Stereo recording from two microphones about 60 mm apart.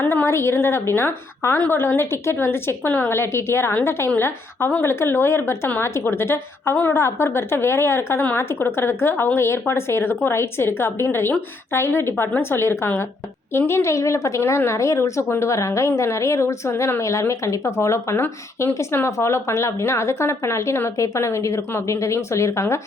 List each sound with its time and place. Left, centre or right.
0.3 s a woman's voice: left